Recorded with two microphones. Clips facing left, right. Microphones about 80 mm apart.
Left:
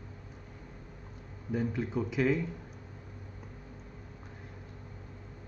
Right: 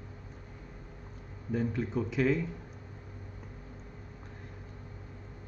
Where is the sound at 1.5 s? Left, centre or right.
Centre.